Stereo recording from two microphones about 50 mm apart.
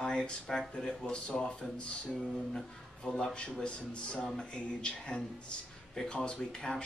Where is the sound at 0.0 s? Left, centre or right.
Centre.